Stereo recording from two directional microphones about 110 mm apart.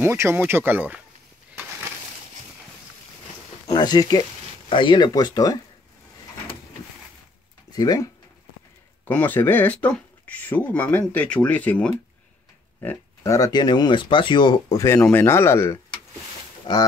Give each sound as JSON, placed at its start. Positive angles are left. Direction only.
{"t": 0.0, "sound": "speech", "side_deg": -20}
{"t": 3.7, "sound": "speech", "side_deg": 40}
{"t": 7.7, "sound": "speech", "side_deg": 35}
{"t": 9.0, "sound": "speech", "side_deg": 15}
{"t": 13.2, "sound": "speech", "side_deg": 30}
{"t": 14.7, "sound": "speech", "side_deg": 30}
{"t": 16.7, "sound": "livestock", "side_deg": 45}